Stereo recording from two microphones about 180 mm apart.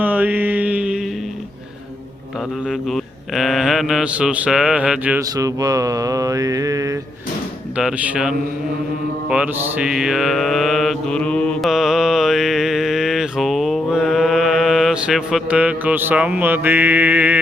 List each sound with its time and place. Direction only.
0.0 s mantra: 10° right (ahead or behind)
2.6 s speech: centre (ahead or behind)
5.4 s mantra: 20° right (ahead or behind)
7.8 s speech: 5° right (ahead or behind)
9.3 s mantra: 5° right (ahead or behind)